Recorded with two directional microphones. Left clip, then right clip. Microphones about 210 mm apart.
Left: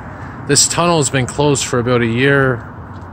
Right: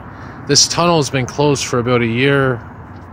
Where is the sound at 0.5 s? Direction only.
10° right (ahead or behind).